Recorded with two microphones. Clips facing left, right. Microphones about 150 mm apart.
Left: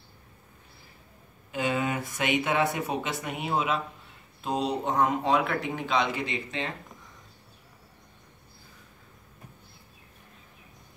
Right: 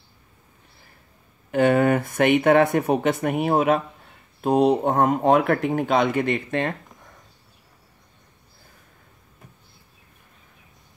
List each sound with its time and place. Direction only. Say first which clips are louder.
1.5 s speech: right 11 dB; 55° right (ahead or behind)